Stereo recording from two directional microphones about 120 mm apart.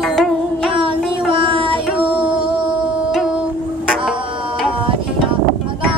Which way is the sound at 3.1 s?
Centre (ahead or behind).